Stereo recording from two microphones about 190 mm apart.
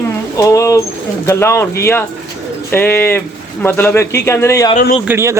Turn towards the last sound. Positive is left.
turn(degrees=-15)  # may be behind; listen again after turning